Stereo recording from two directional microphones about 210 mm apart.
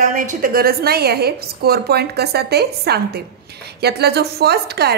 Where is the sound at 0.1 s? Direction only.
40° right (ahead or behind).